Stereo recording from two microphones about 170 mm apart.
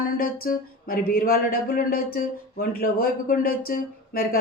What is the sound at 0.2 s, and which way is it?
Speech, 60° left (ahead or behind).